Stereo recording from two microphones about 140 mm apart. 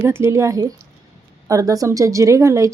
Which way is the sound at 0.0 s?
20° right (ahead or behind).